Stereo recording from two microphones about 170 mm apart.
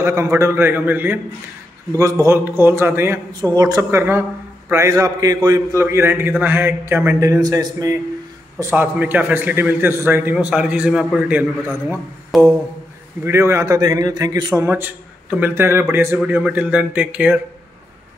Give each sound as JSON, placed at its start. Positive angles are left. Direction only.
{"t": 0.0, "sound": "a man's voice", "side_deg": -15}
{"t": 12.3, "sound": "a sound", "side_deg": 0}
{"t": 13.2, "sound": "a man's voice", "side_deg": -15}